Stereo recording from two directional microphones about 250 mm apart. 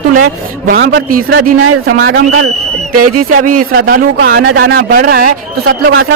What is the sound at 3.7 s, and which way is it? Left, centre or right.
Speech, right.